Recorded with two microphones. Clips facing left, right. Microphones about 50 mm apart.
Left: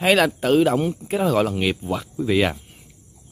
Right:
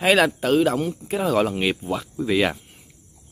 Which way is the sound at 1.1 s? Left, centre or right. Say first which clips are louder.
Left 1 dB; centre.